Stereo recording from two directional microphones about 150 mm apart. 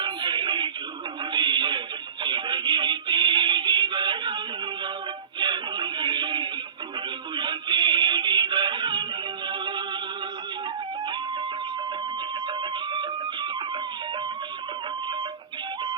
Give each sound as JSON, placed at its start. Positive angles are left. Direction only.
{"t": 0.0, "sound": "music", "side_deg": -30}
{"t": 1.3, "sound": "a sound", "side_deg": -30}
{"t": 2.2, "sound": "music", "side_deg": -30}
{"t": 5.4, "sound": "music", "side_deg": -30}
{"t": 12.9, "sound": "music", "side_deg": -30}